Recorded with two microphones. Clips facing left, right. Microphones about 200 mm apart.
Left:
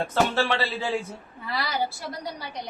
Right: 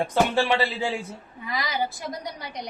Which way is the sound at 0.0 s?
15° right (ahead or behind).